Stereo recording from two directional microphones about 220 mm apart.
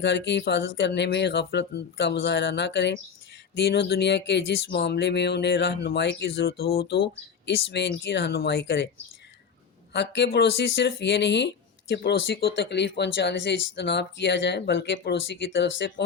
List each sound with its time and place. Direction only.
0.0 s speech: 50° left (ahead or behind)
9.9 s speech: 50° left (ahead or behind)